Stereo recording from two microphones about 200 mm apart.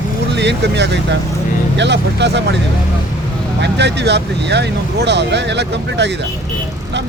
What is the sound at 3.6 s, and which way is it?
Speech, 60° right (ahead or behind).